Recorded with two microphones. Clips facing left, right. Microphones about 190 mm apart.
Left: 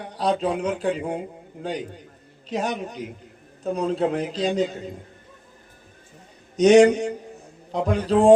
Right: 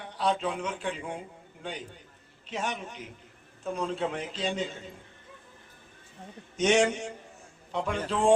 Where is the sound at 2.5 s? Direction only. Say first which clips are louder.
Left 8 dB; 40° left (ahead or behind).